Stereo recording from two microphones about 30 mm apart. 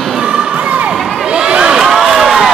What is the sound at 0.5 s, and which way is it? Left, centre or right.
Cheering, right.